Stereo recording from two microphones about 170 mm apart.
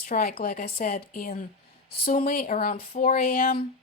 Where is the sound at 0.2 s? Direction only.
60° left (ahead or behind).